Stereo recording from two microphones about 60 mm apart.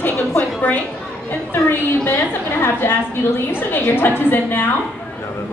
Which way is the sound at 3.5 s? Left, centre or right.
Left.